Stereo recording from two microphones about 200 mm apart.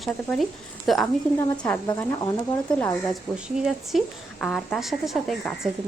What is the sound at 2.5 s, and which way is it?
Speech, 10° left (ahead or behind).